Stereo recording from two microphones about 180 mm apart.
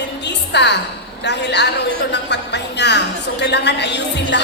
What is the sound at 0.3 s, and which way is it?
Music, 70° left (ahead or behind).